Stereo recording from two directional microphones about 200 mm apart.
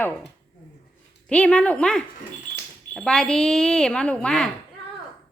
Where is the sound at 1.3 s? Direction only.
5° left (ahead or behind).